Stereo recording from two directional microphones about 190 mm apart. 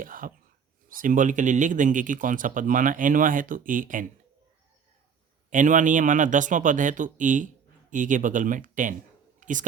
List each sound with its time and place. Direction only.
0.0 s speech: 45° right (ahead or behind)
5.5 s speech: 40° right (ahead or behind)